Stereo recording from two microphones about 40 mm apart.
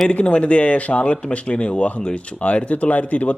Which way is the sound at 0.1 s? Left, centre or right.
Left.